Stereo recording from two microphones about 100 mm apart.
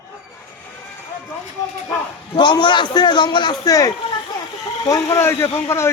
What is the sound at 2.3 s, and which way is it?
A man's voice, 50° left (ahead or behind).